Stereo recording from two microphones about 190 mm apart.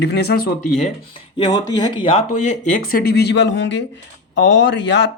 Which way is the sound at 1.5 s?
25° left (ahead or behind).